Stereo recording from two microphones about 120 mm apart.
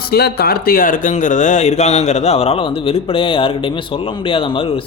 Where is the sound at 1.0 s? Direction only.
90° left.